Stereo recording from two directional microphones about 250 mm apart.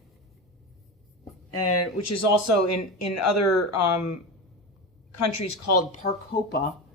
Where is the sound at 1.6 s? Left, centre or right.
Left.